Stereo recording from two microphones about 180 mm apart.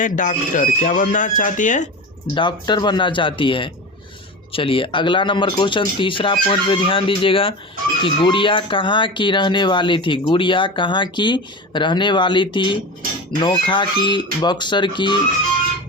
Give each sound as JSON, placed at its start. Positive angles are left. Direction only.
{"t": 0.0, "sound": "speech", "side_deg": 45}
{"t": 2.3, "sound": "speech", "side_deg": 25}